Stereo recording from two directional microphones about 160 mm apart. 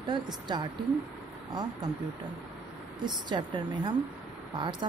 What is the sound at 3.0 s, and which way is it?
Speech, 30° right (ahead or behind).